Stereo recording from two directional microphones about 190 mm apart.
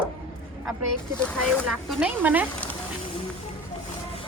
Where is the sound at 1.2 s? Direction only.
5° left (ahead or behind).